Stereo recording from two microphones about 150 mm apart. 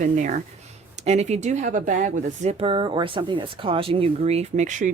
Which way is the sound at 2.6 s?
35° right (ahead or behind).